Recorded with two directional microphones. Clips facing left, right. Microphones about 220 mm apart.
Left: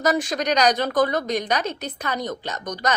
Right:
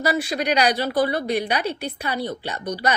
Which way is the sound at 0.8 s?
45° left (ahead or behind).